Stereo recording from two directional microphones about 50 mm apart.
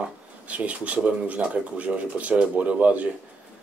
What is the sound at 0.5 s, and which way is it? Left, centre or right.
Speech, right.